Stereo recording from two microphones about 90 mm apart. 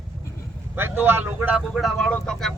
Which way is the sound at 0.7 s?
25° right (ahead or behind).